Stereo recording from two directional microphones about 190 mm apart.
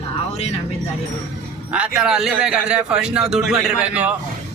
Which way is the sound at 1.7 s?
5° right (ahead or behind).